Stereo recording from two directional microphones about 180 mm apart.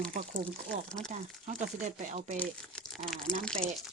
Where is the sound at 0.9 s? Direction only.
5° left (ahead or behind).